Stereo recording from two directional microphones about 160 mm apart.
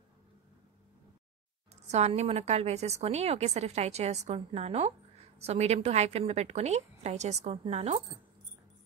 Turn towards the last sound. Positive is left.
turn(degrees=-40)  # may be behind; listen again after turning